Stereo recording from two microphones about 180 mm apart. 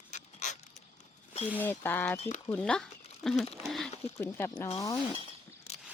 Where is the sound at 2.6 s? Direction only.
5° left (ahead or behind).